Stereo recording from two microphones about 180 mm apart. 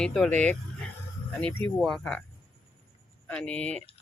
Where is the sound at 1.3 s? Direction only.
5° left (ahead or behind).